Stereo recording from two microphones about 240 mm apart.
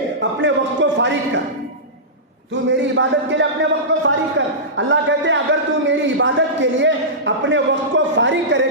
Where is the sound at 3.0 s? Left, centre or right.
Right.